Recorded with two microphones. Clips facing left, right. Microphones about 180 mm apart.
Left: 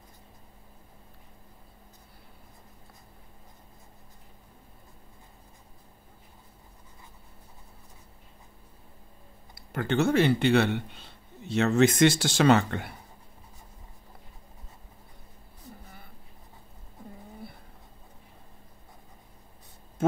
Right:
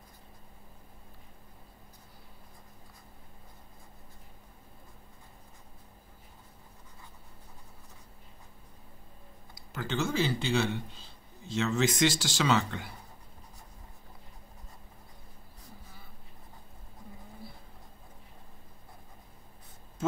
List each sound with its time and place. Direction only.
9.6 s speech: 55° left (ahead or behind)
20.0 s tick: 60° left (ahead or behind)